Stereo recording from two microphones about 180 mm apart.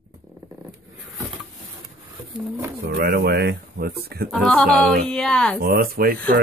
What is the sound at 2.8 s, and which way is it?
Speech, 60° right (ahead or behind).